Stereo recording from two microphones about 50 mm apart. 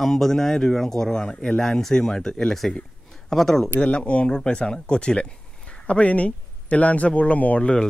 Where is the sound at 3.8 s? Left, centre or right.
Left.